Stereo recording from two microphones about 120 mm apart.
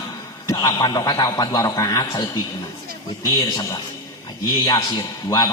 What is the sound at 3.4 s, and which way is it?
A man's voice, 30° left (ahead or behind).